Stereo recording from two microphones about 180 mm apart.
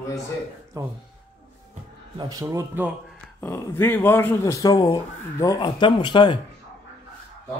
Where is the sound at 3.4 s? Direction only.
15° left (ahead or behind).